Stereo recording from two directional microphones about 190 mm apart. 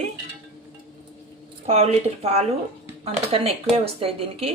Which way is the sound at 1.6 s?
35° right (ahead or behind).